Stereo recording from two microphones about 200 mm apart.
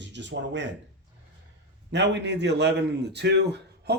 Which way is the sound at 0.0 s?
60° right (ahead or behind).